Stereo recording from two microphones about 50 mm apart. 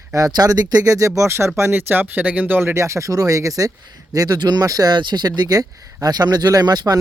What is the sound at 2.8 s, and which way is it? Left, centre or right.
Speech, right.